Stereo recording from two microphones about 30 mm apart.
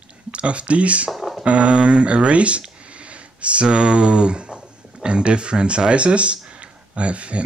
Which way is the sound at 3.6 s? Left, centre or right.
Right.